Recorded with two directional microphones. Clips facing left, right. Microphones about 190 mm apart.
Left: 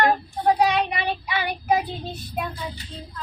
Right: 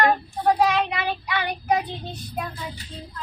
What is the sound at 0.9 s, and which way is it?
Child singing, 20° left (ahead or behind).